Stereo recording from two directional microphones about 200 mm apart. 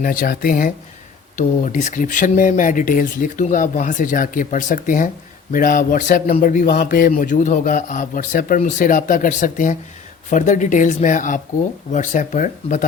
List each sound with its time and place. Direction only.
0.0 s speech: 45° left (ahead or behind)